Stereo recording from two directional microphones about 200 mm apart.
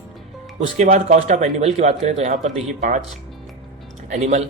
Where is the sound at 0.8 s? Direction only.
35° right (ahead or behind).